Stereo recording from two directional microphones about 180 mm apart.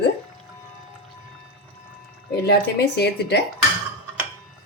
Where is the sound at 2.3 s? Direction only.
65° left (ahead or behind).